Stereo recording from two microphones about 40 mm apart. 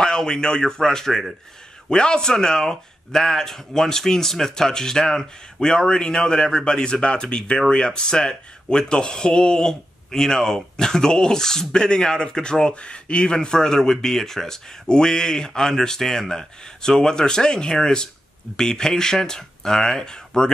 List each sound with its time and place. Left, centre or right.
0.0 s speech: centre
1.9 s speech: left